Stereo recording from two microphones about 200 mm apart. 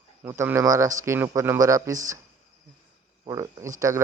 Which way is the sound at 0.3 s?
15° right (ahead or behind).